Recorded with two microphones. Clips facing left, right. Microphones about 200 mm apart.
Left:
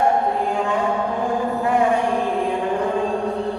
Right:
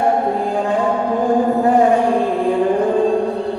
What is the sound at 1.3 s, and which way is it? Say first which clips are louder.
Chant: right 8 dB; 35° right (ahead or behind).